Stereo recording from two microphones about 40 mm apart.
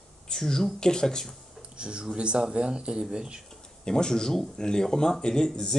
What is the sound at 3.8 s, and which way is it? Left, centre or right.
Speech, centre.